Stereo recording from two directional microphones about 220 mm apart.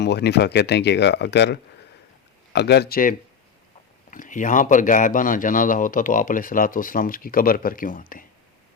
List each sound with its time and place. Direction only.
0.0 s a man's voice: 50° left (ahead or behind)